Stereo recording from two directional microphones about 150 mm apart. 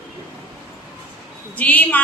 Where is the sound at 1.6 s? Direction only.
10° left (ahead or behind).